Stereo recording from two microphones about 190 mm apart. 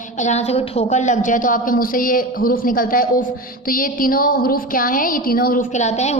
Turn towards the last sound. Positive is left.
turn(degrees=35)  # may be behind; listen again after turning